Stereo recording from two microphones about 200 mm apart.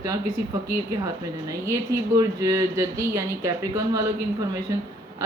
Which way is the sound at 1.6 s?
15° right (ahead or behind).